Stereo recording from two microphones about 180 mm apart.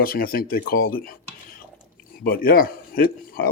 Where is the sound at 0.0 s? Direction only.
55° left (ahead or behind).